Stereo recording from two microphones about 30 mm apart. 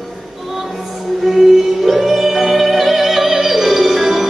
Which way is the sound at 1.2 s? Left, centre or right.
Centre.